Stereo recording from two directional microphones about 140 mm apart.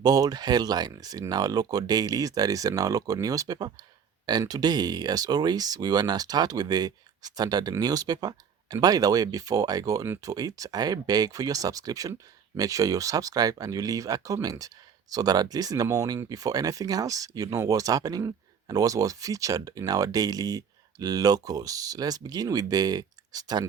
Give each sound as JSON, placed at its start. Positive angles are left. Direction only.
{"t": 0.0, "sound": "speech", "side_deg": -30}